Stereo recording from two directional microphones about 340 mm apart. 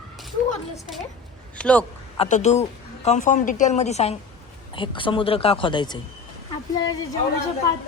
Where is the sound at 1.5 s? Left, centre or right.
Centre.